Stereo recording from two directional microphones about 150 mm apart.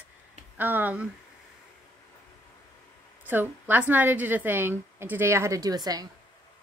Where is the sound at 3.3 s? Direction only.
10° right (ahead or behind).